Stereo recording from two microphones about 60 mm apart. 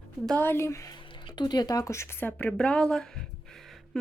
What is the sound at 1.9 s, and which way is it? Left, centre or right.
Speech, left.